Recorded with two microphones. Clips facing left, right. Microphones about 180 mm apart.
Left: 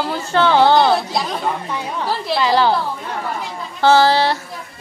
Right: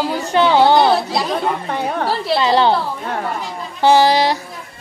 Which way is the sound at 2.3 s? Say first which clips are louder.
Right 1 dB; 25° right (ahead or behind).